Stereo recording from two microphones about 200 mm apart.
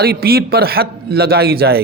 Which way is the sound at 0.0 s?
50° right (ahead or behind).